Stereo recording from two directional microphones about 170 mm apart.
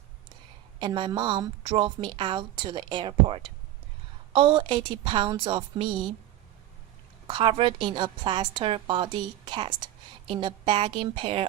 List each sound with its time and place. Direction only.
0.8 s a woman's voice: 25° right (ahead or behind)
7.3 s a woman's voice: 30° right (ahead or behind)